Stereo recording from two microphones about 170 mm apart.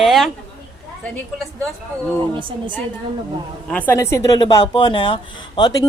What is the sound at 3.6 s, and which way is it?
Speech, 10° left (ahead or behind).